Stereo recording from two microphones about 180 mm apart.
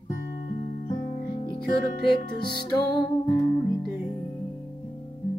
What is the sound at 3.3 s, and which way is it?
Music, 15° left (ahead or behind).